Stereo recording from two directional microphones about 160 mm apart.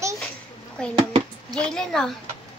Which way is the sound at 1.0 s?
30° right (ahead or behind).